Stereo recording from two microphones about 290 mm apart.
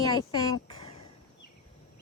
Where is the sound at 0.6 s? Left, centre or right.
Centre.